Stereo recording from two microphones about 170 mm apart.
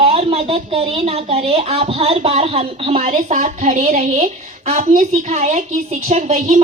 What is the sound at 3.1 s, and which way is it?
Speech, 45° right (ahead or behind).